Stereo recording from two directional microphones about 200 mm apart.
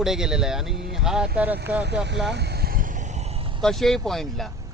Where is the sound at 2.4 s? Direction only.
50° right (ahead or behind).